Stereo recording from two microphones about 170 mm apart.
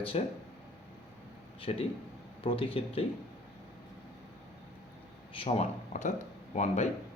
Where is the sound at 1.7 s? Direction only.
35° left (ahead or behind).